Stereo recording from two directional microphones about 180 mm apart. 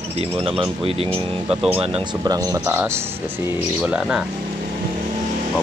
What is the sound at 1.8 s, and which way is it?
Speech, 30° right (ahead or behind).